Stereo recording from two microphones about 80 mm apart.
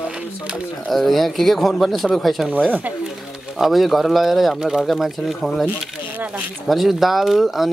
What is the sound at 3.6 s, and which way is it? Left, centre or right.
Speech, centre.